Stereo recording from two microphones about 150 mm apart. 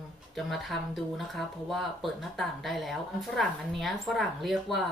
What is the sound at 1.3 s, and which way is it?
Speech, centre (ahead or behind).